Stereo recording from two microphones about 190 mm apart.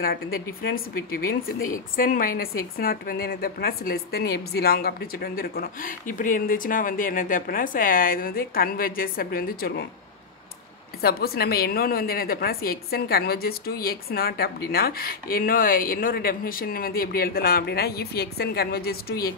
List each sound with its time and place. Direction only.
0.6 s a woman's voice: 50° left (ahead or behind)
11.0 s a woman's voice: 55° left (ahead or behind)